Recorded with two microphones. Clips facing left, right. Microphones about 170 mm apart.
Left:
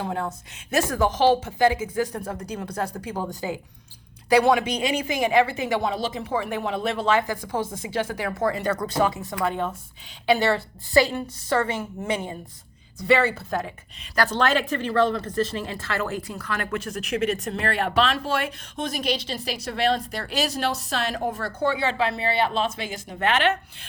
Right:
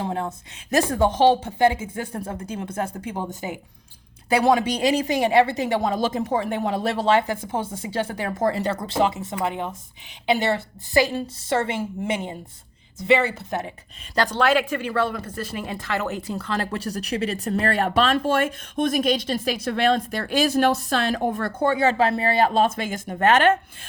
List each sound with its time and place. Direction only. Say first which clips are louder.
0.0 s a woman's voice: right 1 dB; 25° right (ahead or behind)
5.8 s a woman's voice: right 4 dB; 45° right (ahead or behind); by 13.7 s 20° right (ahead or behind)
14.3 s speech: right 4 dB; 5° right (ahead or behind); by 23.9 s 45° right (ahead or behind)